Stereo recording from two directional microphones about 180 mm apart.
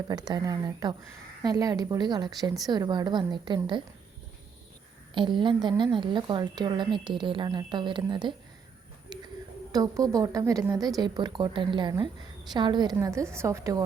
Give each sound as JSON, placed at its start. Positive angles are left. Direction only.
{"t": 0.1, "sound": "a woman's voice", "side_deg": -20}
{"t": 5.1, "sound": "a woman's voice", "side_deg": -25}
{"t": 9.1, "sound": "a sound", "side_deg": -25}
{"t": 9.7, "sound": "a woman's voice", "side_deg": -20}